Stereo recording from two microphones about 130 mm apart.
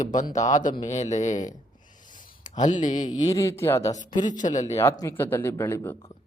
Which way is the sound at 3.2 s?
25° left (ahead or behind).